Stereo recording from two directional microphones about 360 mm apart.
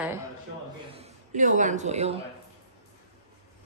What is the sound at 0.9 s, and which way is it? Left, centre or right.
A man's voice, centre.